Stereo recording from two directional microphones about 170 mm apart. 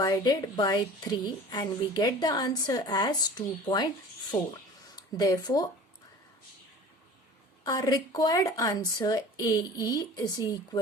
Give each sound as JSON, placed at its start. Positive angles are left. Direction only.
{"t": 0.0, "sound": "a woman's voice", "side_deg": 20}
{"t": 7.6, "sound": "a woman's voice", "side_deg": 20}